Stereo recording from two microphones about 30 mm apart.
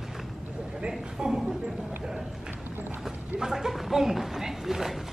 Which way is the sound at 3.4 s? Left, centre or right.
Centre.